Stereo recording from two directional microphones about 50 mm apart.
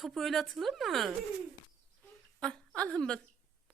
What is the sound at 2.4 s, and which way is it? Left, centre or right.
Speech, left.